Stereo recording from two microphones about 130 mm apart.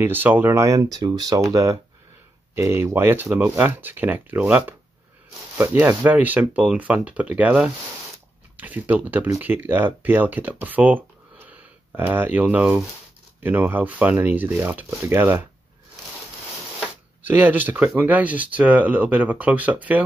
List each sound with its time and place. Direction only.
0.0 s speech: 15° right (ahead or behind)
17.2 s speech: 15° right (ahead or behind)